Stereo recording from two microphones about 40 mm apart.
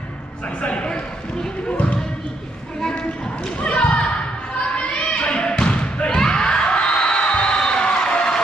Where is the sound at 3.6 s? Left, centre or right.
Left.